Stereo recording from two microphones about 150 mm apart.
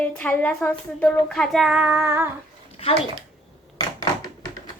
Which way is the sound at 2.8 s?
40° left (ahead or behind).